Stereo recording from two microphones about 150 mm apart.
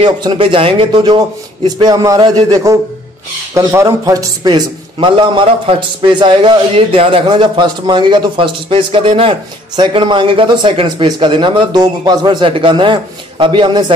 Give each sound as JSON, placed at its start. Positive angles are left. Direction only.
{"t": 0.0, "sound": "a man's voice", "side_deg": -35}